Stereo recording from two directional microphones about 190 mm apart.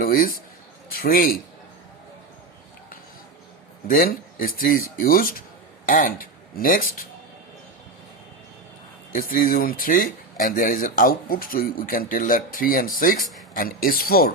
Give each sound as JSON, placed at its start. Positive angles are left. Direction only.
{"t": 0.0, "sound": "speech", "side_deg": 50}
{"t": 3.8, "sound": "speech", "side_deg": 50}
{"t": 9.1, "sound": "speech", "side_deg": 45}